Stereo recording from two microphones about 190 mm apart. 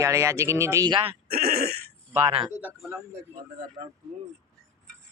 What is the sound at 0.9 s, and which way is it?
Speech, 30° right (ahead or behind).